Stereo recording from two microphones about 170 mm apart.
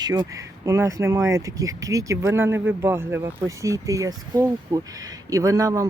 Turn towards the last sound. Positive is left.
turn(degrees=-20)  # may be behind; listen again after turning